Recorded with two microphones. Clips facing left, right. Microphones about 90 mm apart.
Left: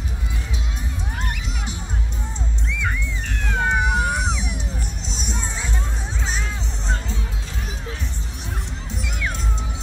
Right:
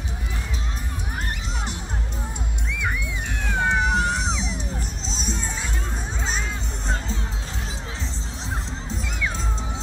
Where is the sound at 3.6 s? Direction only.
5° left (ahead or behind).